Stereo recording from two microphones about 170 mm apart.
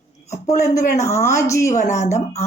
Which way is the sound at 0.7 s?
45° left (ahead or behind).